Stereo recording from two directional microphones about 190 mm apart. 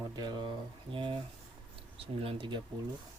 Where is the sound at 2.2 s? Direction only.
25° right (ahead or behind).